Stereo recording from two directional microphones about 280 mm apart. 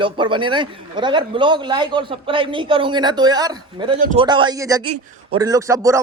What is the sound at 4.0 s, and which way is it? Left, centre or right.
Speech, right.